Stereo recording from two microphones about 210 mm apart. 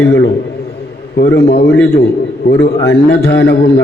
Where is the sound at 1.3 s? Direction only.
55° left (ahead or behind).